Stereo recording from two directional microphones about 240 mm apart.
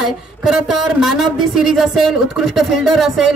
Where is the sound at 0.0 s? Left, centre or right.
Centre.